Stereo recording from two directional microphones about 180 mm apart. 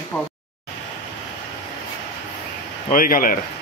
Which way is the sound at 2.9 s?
50° left (ahead or behind).